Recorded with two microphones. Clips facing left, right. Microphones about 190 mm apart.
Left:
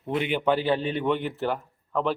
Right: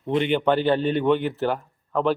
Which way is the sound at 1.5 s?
35° right (ahead or behind).